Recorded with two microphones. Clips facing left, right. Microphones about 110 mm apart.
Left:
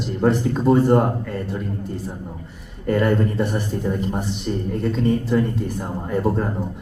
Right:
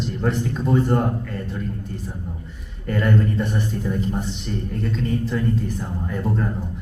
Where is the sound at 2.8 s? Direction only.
35° left (ahead or behind).